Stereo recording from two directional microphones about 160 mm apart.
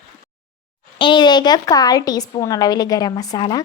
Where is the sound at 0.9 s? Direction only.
30° left (ahead or behind).